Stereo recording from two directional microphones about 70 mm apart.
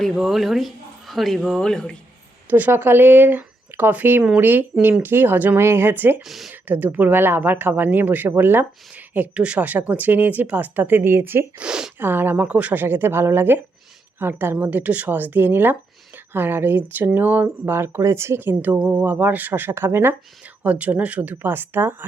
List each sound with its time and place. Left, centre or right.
0.0 s speech: centre
2.5 s speech: right
6.2 s speech: centre
6.5 s speech: right
11.5 s speech: centre
11.9 s speech: right
17.4 s speech: right
18.8 s speech: centre
19.1 s speech: right
20.4 s speech: centre